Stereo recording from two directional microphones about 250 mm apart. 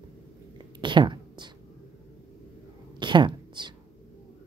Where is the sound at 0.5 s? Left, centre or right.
Centre.